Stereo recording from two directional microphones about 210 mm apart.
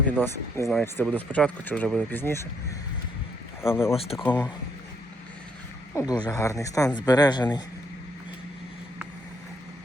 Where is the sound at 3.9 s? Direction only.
30° left (ahead or behind).